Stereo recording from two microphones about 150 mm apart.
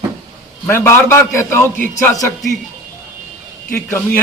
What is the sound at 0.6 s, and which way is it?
A man's voice, 15° left (ahead or behind).